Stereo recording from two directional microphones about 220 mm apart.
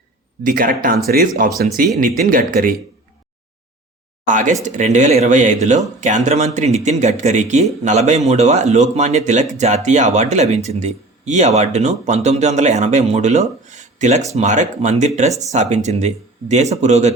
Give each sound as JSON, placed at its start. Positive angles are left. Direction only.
{"t": 0.4, "sound": "speech", "side_deg": -40}
{"t": 4.3, "sound": "speech", "side_deg": -35}
{"t": 13.7, "sound": "a sound", "side_deg": -35}
{"t": 14.3, "sound": "speech", "side_deg": -35}